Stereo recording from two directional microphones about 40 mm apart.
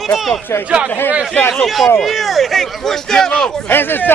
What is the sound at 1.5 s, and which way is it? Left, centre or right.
Speech, centre.